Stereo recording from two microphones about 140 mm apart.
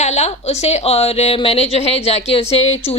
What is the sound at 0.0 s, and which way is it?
A woman's voice, 55° left (ahead or behind).